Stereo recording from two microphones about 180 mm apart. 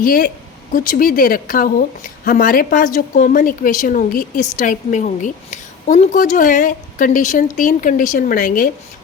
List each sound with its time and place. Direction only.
0.0 s a woman's voice: 50° left (ahead or behind)